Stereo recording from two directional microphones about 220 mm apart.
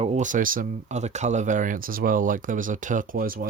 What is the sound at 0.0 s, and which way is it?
Speech, 30° right (ahead or behind).